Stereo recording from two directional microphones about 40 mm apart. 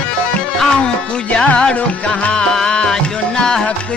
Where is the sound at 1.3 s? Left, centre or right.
Left.